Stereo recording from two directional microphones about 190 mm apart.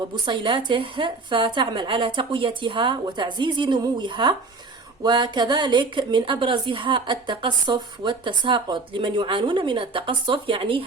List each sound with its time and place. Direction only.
0.3 s a woman's voice: 25° right (ahead or behind)